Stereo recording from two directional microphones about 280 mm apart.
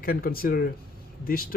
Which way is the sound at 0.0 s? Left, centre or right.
Left.